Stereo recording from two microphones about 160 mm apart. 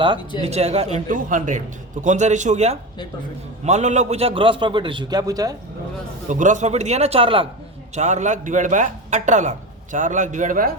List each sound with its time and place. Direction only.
0.4 s a man's voice: 40° right (ahead or behind); by 5.5 s 20° right (ahead or behind)
6.2 s speech: 50° right (ahead or behind)
7.9 s speech: 45° right (ahead or behind)